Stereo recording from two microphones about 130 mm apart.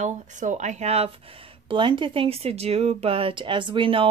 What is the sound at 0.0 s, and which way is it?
Speech, 70° right (ahead or behind).